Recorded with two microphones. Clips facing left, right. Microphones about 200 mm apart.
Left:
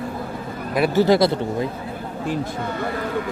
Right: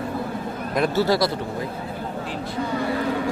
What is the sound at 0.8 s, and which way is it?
Speech, 15° left (ahead or behind).